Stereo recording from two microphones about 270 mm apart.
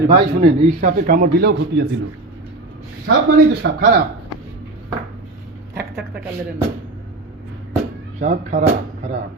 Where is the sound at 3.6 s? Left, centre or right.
Right.